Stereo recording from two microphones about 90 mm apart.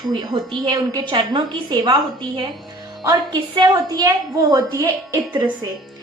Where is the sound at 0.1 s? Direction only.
55° right (ahead or behind).